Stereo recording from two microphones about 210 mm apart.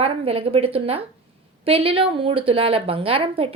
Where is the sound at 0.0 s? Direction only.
25° right (ahead or behind).